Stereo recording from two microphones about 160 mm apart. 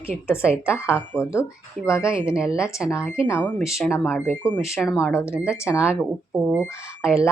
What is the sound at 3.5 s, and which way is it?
Speech, centre (ahead or behind).